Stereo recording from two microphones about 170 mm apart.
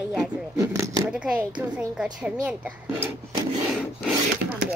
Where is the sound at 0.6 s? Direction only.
20° right (ahead or behind).